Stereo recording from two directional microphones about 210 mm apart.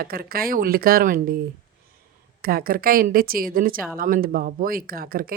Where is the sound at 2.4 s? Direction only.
45° right (ahead or behind).